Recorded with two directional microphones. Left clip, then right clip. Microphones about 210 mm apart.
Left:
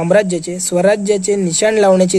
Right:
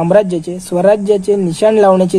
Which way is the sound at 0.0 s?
15° left (ahead or behind).